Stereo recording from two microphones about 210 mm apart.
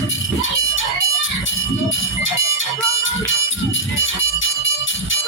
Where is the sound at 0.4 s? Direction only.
65° left (ahead or behind).